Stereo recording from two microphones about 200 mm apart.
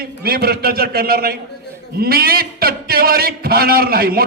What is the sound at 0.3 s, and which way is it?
A man's voice, 50° right (ahead or behind).